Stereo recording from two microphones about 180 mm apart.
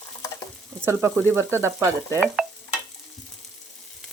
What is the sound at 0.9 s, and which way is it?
Speech, 15° right (ahead or behind).